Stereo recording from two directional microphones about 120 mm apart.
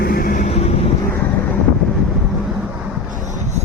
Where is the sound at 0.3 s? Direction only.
65° left (ahead or behind).